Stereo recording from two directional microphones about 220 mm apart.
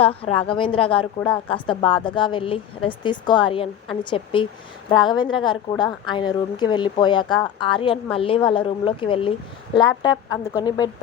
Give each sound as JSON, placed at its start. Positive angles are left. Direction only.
{"t": 0.0, "sound": "a woman's voice", "side_deg": 25}